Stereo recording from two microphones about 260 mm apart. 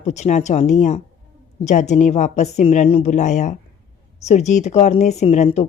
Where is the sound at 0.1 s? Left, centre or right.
Left.